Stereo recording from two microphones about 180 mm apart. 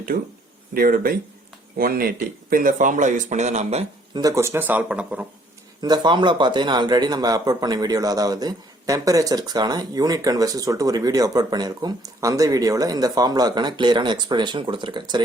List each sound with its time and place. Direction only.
0.1 s speech: 55° right (ahead or behind); by 3.8 s 40° right (ahead or behind)
4.1 s speech: 20° right (ahead or behind)
5.8 s speech: 25° right (ahead or behind)